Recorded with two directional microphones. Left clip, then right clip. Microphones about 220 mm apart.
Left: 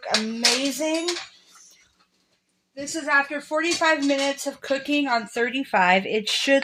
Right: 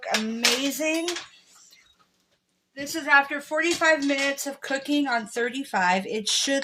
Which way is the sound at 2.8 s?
10° left (ahead or behind).